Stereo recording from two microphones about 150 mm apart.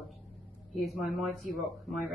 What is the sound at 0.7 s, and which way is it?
A woman's voice, centre (ahead or behind).